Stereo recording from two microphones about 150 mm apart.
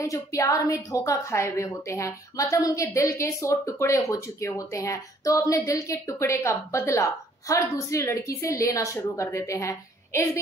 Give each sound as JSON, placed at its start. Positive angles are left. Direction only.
{"t": 0.0, "sound": "a woman's voice", "side_deg": 20}